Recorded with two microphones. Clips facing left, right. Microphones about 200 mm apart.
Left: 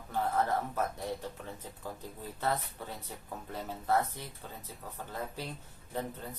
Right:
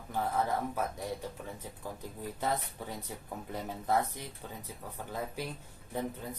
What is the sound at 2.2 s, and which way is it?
Speech, 15° right (ahead or behind).